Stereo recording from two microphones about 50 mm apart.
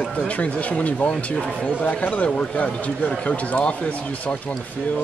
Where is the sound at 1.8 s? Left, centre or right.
Left.